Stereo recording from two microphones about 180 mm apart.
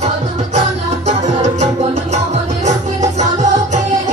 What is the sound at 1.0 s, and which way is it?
Music, 40° right (ahead or behind).